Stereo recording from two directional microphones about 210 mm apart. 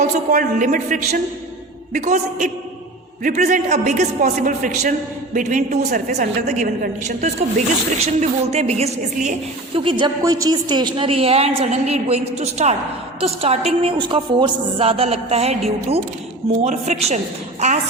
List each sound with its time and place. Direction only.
0.0 s a man's voice: 40° right (ahead or behind)